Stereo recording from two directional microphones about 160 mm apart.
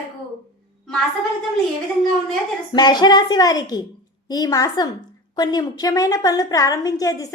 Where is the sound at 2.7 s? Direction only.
25° left (ahead or behind).